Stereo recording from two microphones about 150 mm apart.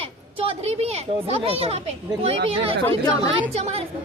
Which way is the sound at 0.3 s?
40° right (ahead or behind).